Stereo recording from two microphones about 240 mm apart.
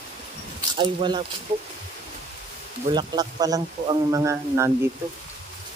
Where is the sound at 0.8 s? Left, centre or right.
Centre.